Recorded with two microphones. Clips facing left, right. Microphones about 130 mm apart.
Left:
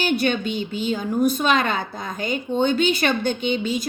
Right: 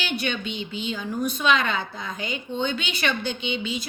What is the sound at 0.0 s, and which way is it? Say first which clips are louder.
A woman's voice: left 7 dB; 45° left (ahead or behind).